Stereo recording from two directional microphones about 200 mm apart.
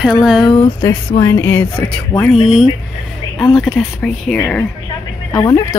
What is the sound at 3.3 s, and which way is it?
Speech, 5° left (ahead or behind).